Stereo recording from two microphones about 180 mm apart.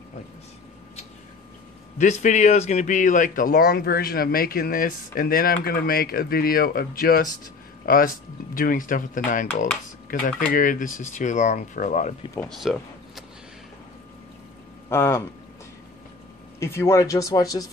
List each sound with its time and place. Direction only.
2.0 s a man's voice: 40° left (ahead or behind)
12.4 s speech: centre (ahead or behind)
14.9 s speech: 15° left (ahead or behind)
16.5 s speech: 15° left (ahead or behind)